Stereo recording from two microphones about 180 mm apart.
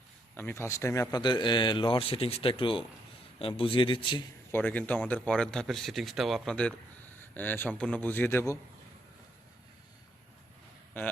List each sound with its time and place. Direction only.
0.3 s a man's voice: 10° left (ahead or behind)
4.5 s a man's voice: 10° left (ahead or behind)
11.0 s a man's voice: 10° left (ahead or behind)